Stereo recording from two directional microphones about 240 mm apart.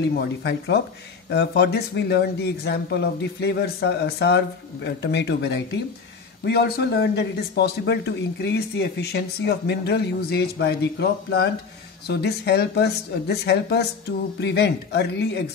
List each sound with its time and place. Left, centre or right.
0.1 s a man's voice: left